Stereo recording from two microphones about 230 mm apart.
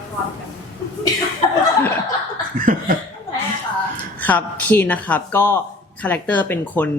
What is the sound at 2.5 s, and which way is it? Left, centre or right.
Laughter, right.